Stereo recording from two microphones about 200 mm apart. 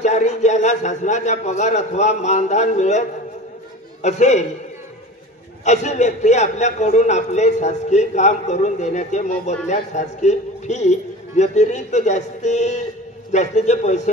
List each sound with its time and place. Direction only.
0.0 s a man's voice: 35° left (ahead or behind)
5.7 s a man's voice: 35° left (ahead or behind)